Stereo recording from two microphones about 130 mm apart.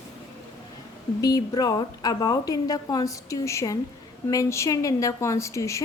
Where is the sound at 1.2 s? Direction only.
30° left (ahead or behind).